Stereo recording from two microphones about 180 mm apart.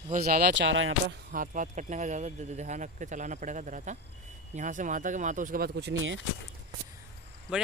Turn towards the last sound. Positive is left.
turn(degrees=-5)  # may be behind; listen again after turning